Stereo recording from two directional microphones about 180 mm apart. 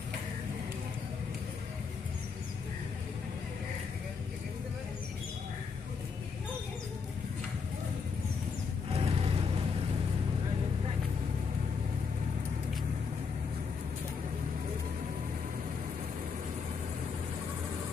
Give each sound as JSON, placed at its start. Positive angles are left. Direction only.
{"t": 8.9, "sound": "music", "side_deg": -35}